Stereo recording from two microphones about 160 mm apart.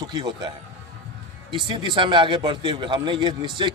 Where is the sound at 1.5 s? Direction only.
30° right (ahead or behind).